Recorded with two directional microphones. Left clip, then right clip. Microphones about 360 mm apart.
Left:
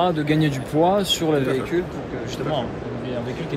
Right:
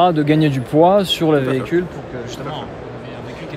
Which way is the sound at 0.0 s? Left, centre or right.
Right.